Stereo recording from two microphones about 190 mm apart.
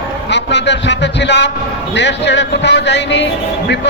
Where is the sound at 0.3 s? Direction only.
65° left (ahead or behind).